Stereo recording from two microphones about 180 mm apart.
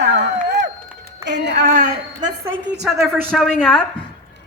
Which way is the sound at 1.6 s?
45° right (ahead or behind).